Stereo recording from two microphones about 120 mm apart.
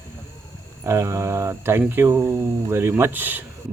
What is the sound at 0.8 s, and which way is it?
Speech, 20° right (ahead or behind).